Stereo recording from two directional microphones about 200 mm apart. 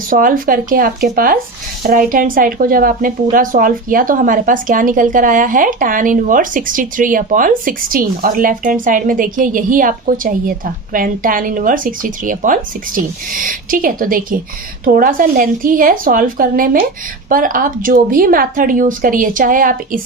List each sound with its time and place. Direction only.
0.1 s speech: 45° right (ahead or behind)